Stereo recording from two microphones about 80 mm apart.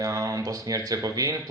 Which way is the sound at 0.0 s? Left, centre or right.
Right.